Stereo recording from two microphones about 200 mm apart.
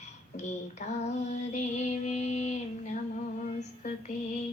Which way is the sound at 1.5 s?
35° left (ahead or behind).